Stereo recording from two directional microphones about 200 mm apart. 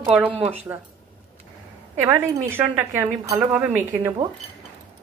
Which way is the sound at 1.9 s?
10° right (ahead or behind).